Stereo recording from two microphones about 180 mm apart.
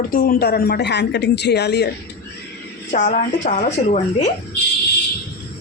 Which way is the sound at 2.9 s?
45° left (ahead or behind).